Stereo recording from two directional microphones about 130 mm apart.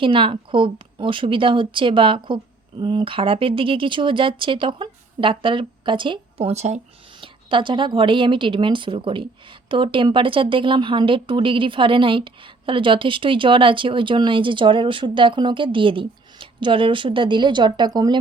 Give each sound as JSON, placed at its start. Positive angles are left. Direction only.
{"t": 0.0, "sound": "speech", "side_deg": -40}
{"t": 7.2, "sound": "speech", "side_deg": -40}